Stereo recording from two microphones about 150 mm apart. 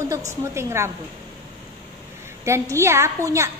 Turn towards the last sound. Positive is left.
turn(degrees=-20)  # may be behind; listen again after turning